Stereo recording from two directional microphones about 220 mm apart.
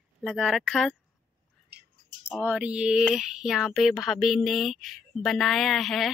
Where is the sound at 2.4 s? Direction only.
5° right (ahead or behind).